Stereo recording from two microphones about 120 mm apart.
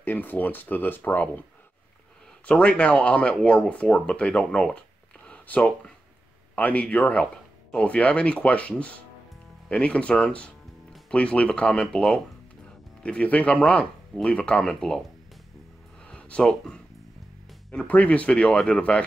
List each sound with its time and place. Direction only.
0.0 s speech: 15° left (ahead or behind)
2.4 s speech: 10° left (ahead or behind)
5.3 s a sound: 10° left (ahead or behind)
6.5 s speech: 10° left (ahead or behind)
16.1 s speech: 10° left (ahead or behind)